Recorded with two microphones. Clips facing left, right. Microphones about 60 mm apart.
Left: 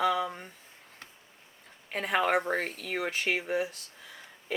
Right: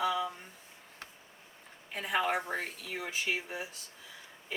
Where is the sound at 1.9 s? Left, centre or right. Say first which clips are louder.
Left 4 dB; left.